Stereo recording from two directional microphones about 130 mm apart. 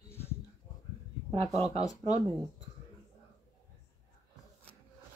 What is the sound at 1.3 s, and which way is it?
Speech, 50° right (ahead or behind).